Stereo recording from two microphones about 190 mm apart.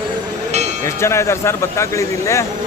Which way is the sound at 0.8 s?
15° left (ahead or behind).